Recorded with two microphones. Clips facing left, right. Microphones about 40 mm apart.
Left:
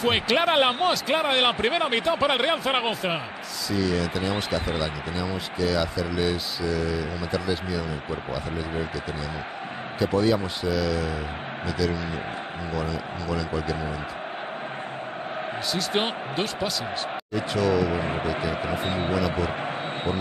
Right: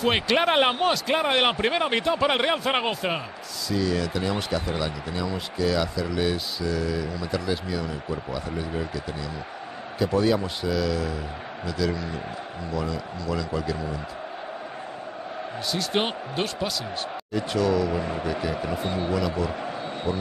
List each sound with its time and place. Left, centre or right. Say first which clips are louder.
0.0 s speech: even; centre
9.9 s speech: even; centre
15.7 s speech: right 1 dB; centre
17.9 s speech: left 1 dB; left